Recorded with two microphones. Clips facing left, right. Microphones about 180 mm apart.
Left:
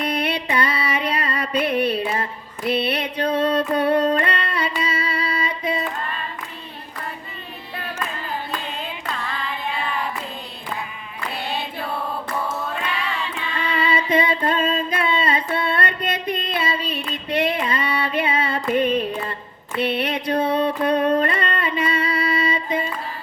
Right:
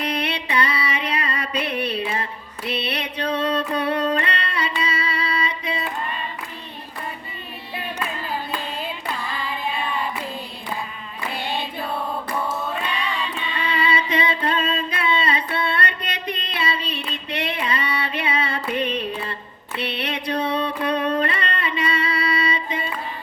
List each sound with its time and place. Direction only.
0.0 s music: 50° left (ahead or behind)
2.6 s female singing: 50° left (ahead or behind)
3.3 s music: 50° left (ahead or behind)
9.0 s carnatic music: 10° right (ahead or behind)
12.9 s choir: 5° left (ahead or behind)
13.7 s singing: 50° left (ahead or behind)
18.7 s carnatic music: 50° left (ahead or behind)
19.8 s a sound: 50° left (ahead or behind)